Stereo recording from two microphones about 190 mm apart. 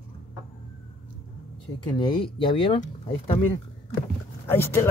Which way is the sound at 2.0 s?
25° left (ahead or behind).